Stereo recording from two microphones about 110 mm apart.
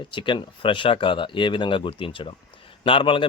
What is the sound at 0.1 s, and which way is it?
Speech, 45° left (ahead or behind).